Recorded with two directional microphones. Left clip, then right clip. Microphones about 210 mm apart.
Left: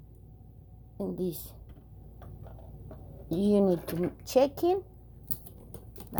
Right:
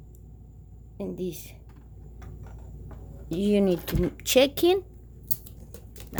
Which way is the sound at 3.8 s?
30° right (ahead or behind).